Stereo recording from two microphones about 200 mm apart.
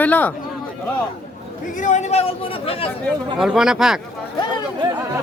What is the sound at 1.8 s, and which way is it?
Speech, 35° left (ahead or behind).